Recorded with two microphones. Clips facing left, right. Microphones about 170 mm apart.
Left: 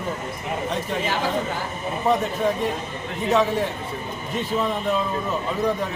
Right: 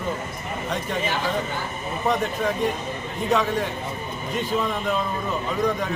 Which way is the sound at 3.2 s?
5° left (ahead or behind).